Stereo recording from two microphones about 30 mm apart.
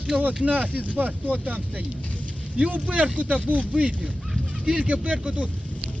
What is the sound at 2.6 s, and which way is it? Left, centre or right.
Speech, right.